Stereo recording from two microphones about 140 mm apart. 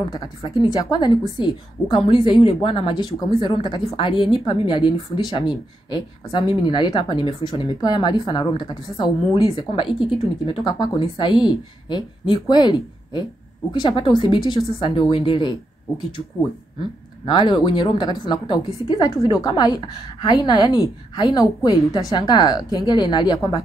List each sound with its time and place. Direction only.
0.1 s a woman's voice: 30° left (ahead or behind)
17.3 s a woman's voice: 35° left (ahead or behind)